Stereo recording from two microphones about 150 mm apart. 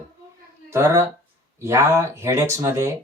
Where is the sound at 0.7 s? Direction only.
15° right (ahead or behind).